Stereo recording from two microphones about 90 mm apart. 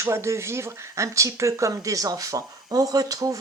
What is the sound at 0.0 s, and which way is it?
Speech, 30° right (ahead or behind).